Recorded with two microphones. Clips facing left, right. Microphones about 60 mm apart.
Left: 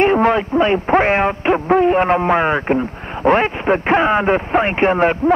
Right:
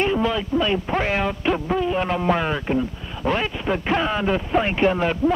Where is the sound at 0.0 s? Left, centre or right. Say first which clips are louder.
Left 8 dB; left.